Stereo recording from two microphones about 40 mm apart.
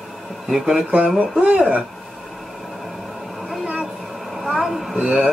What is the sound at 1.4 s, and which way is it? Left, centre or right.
Speech, right.